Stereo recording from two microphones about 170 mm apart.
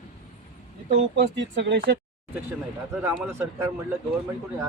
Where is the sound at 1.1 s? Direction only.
90° right.